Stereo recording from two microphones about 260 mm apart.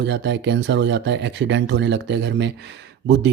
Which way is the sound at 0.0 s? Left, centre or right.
Right.